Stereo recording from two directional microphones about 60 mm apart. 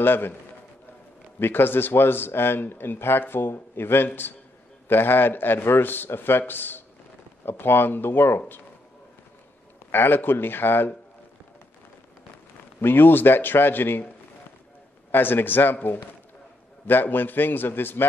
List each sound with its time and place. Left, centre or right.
0.0 s a man's voice: left
1.4 s a man's voice: left
9.8 s a man's voice: left
12.8 s a man's voice: left
15.0 s a man's voice: left